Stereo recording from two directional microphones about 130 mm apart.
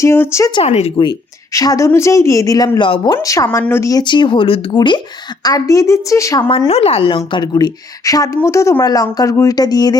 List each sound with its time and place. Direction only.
0.0 s speech: 20° left (ahead or behind)
0.6 s speech: 50° left (ahead or behind)
1.5 s speech: 25° left (ahead or behind)
3.2 s speech: 25° left (ahead or behind)
4.0 s a woman's voice: 35° left (ahead or behind)
6.7 s a woman's voice: 50° left (ahead or behind); by 10.0 s 30° left (ahead or behind)